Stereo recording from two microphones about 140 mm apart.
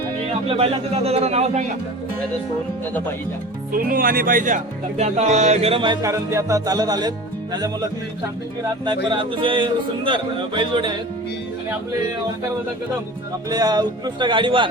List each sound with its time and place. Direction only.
0.4 s speech: 45° right (ahead or behind)
3.7 s speech: 90° right; by 6.0 s 40° right (ahead or behind)
6.0 s music: 25° right (ahead or behind)
8.8 s speech: 35° right (ahead or behind)
13.5 s speech: 30° right (ahead or behind)